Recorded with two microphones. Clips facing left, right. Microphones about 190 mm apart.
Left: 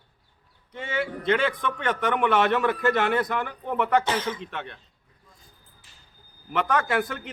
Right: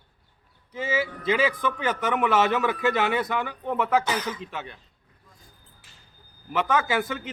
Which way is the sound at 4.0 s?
30° left (ahead or behind).